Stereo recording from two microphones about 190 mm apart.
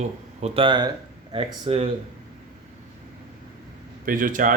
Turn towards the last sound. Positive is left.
turn(degrees=-45)  # may be behind; listen again after turning